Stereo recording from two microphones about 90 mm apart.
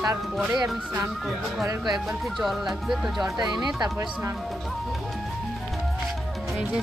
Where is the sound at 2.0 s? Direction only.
Centre (ahead or behind).